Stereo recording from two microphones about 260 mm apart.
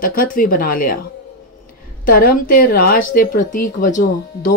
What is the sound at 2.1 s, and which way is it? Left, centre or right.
Speech, left.